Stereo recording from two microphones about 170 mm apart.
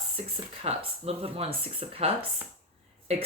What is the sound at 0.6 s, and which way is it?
Speech, 35° right (ahead or behind).